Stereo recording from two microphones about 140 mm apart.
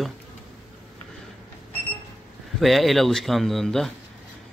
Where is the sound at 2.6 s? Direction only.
Centre (ahead or behind).